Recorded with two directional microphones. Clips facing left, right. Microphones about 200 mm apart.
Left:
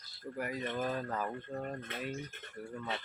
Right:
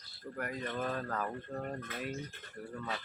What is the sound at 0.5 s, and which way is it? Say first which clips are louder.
Speech: left 1 dB; 20° left (ahead or behind).